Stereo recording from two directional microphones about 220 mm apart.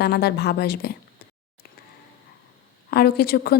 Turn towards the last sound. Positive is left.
turn(degrees=45)  # may be behind; listen again after turning